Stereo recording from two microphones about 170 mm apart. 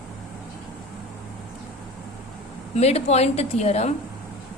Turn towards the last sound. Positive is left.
turn(degrees=40)  # may be behind; listen again after turning